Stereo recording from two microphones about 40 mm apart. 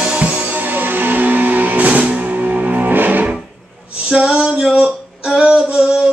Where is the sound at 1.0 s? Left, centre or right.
Right.